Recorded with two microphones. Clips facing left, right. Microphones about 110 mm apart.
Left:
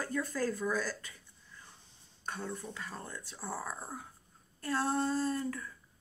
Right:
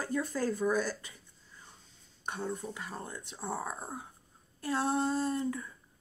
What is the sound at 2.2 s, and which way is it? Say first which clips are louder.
Speech: right 3 dB; 20° right (ahead or behind).